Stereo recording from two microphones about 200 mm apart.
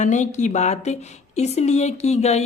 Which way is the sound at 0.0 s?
35° left (ahead or behind).